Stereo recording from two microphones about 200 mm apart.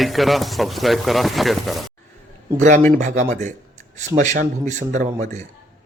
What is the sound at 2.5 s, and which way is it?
Speech, 40° right (ahead or behind).